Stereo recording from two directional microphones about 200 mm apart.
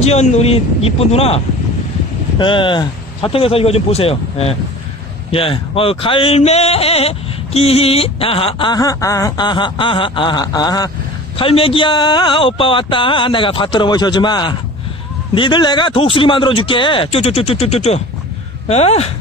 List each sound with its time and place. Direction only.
0.0 s a man's voice: 35° left (ahead or behind)